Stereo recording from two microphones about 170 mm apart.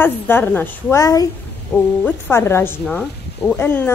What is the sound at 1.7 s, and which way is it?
Speech, 10° left (ahead or behind).